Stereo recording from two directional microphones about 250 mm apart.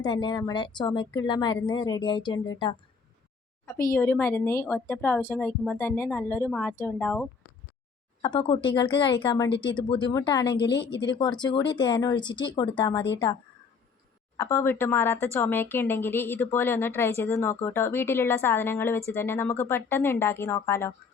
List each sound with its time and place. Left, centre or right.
0.0 s speech: centre
8.2 s a woman's voice: centre
10.4 s a woman's voice: left
11.1 s speech: centre
14.3 s speech: centre